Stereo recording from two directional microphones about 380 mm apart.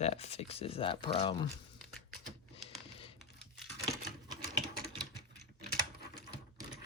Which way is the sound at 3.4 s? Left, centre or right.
Centre.